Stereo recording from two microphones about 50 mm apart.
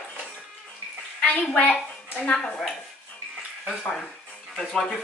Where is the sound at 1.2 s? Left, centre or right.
Left.